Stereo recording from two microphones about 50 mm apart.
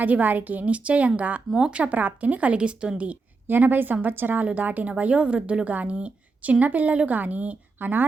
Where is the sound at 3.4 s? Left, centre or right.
Right.